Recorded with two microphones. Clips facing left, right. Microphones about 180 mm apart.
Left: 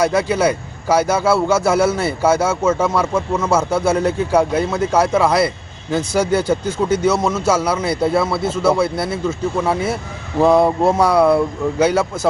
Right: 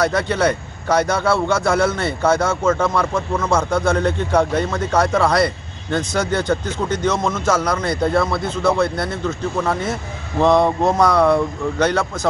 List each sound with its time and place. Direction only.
0.0 s speech: 10° left (ahead or behind)